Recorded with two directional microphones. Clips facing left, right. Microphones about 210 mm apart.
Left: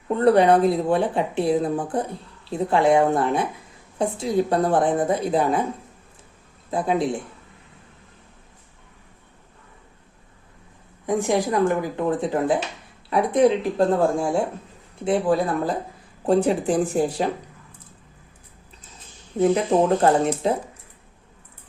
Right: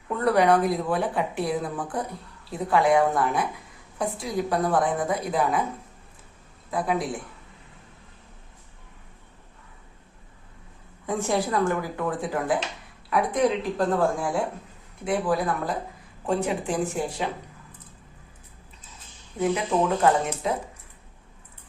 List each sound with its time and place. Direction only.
0.1 s speech: 25° left (ahead or behind)
6.7 s speech: 25° left (ahead or behind)
11.0 s speech: 15° left (ahead or behind); by 17.2 s 35° left (ahead or behind)
19.4 s speech: 35° left (ahead or behind)